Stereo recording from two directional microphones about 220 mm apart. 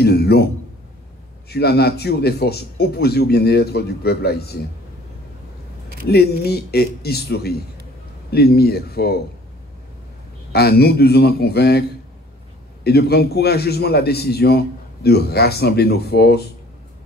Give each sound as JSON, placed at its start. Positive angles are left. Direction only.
{"t": 0.0, "sound": "a sound", "side_deg": 45}
{"t": 1.5, "sound": "a man's voice", "side_deg": 45}
{"t": 6.0, "sound": "a man's voice", "side_deg": 45}
{"t": 10.5, "sound": "a man's voice", "side_deg": 45}
{"t": 12.8, "sound": "a man's voice", "side_deg": 45}